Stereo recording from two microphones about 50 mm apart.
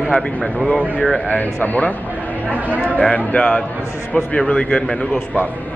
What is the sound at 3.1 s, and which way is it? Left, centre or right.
Speech, centre.